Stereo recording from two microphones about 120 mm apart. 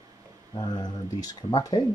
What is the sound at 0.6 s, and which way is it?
Speech, 35° left (ahead or behind).